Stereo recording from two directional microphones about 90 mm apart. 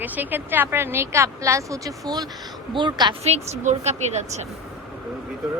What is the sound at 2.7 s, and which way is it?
Speech, 60° right (ahead or behind).